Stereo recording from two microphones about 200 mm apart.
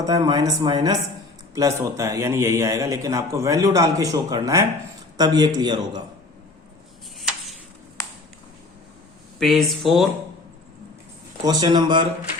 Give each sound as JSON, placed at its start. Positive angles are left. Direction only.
{"t": 0.0, "sound": "a man's voice", "side_deg": -20}
{"t": 9.4, "sound": "speech", "side_deg": 0}
{"t": 11.4, "sound": "speech", "side_deg": -20}